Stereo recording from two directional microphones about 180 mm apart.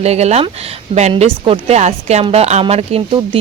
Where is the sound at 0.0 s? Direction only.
35° right (ahead or behind).